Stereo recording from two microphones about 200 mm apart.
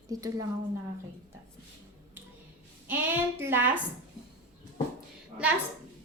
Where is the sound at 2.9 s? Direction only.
10° right (ahead or behind).